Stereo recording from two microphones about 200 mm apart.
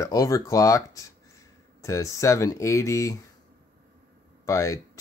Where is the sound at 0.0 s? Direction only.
20° left (ahead or behind).